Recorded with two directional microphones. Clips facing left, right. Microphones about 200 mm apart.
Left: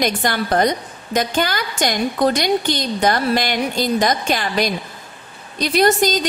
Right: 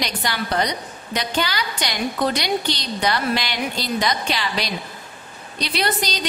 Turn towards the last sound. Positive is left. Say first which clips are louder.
# left 9 dB
turn(degrees=45)  # may be behind; listen again after turning